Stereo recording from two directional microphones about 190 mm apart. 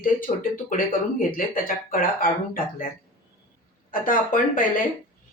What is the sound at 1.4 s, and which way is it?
Speech, 45° left (ahead or behind).